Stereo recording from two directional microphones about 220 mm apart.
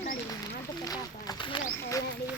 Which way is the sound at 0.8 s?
20° left (ahead or behind).